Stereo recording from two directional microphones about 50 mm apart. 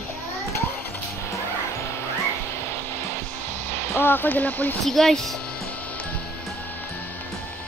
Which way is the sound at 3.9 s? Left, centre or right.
Left.